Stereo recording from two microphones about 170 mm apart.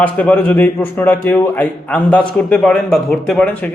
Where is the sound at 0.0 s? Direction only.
10° left (ahead or behind).